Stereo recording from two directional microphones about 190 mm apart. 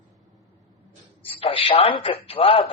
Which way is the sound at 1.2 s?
30° left (ahead or behind).